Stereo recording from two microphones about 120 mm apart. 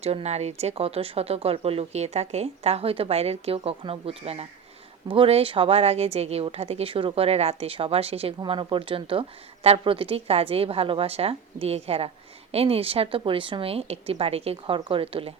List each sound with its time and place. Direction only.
0.0 s speech: 60° right (ahead or behind)
8.4 s a woman's voice: 45° right (ahead or behind)